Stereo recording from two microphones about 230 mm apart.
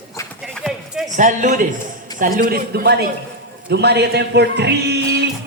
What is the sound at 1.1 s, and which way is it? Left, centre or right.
Speech, right.